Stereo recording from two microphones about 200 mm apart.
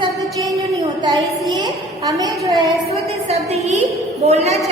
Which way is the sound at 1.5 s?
20° right (ahead or behind).